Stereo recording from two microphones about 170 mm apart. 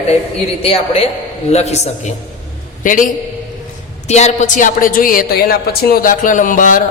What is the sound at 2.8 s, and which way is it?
Speech, 50° left (ahead or behind).